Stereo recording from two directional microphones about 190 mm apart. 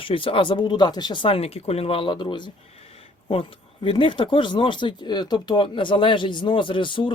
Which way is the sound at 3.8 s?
25° left (ahead or behind).